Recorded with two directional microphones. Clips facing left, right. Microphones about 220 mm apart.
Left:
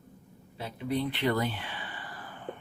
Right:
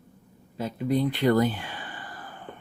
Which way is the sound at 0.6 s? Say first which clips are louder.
Right 6 dB; 45° right (ahead or behind).